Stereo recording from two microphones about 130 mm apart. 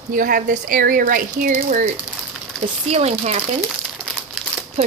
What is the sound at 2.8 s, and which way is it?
Speech, 55° right (ahead or behind).